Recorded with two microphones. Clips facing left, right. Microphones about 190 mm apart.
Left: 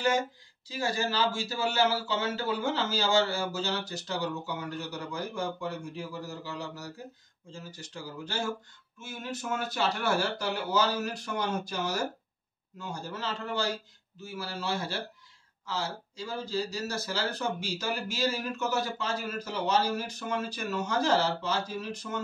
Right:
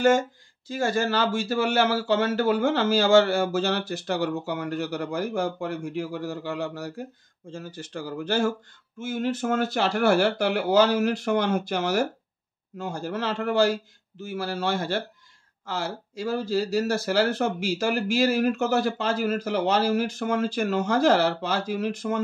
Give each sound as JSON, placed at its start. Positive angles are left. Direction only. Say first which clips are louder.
{"t": 0.7, "sound": "speech", "louder": "right 6 dB", "side_deg": -50}
{"t": 9.0, "sound": "speech", "louder": "right 11 dB", "side_deg": -90}
{"t": 12.7, "sound": "a man's voice", "louder": "right 8 dB", "side_deg": -90}
{"t": 14.3, "sound": "speech", "louder": "right 7 dB", "side_deg": -55}